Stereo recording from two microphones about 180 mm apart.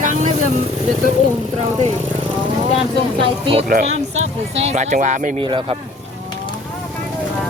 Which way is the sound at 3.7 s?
40° right (ahead or behind).